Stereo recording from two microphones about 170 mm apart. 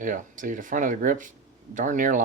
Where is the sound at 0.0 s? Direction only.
50° right (ahead or behind).